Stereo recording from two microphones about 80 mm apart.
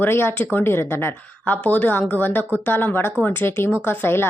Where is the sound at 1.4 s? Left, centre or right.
Centre.